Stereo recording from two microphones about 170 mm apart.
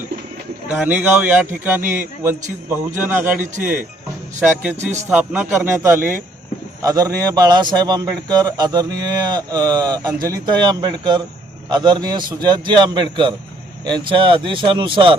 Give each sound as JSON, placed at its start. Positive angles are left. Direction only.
{"t": 0.7, "sound": "a man's voice", "side_deg": -10}